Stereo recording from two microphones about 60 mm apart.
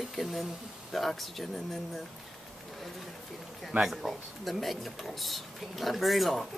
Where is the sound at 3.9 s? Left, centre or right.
Centre.